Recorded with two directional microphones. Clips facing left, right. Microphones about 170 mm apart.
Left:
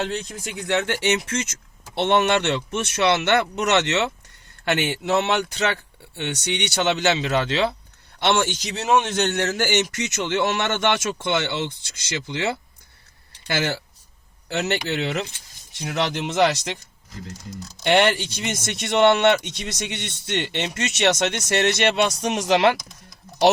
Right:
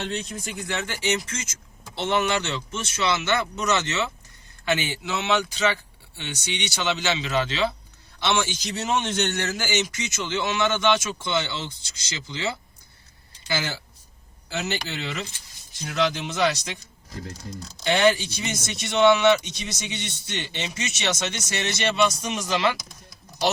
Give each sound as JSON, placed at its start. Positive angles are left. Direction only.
{"t": 0.7, "sound": "speech", "side_deg": 65}
{"t": 17.8, "sound": "speech", "side_deg": 70}